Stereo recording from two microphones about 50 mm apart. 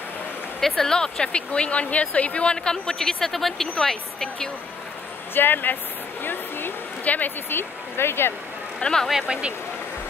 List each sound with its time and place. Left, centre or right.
0.6 s speech: centre
5.3 s speech: left
8.7 s speech: centre